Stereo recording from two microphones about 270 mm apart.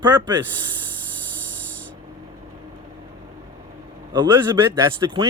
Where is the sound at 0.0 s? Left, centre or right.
Centre.